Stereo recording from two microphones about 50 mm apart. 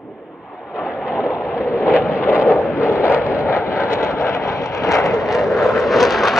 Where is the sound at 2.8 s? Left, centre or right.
Left.